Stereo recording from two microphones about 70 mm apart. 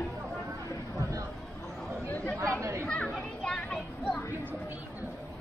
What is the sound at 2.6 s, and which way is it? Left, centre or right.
Chatter, right.